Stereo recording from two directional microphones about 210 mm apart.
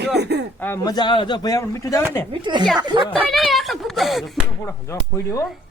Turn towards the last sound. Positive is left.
turn(degrees=15)  # may be behind; listen again after turning